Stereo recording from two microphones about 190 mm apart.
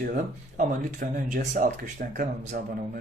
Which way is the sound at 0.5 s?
40° right (ahead or behind).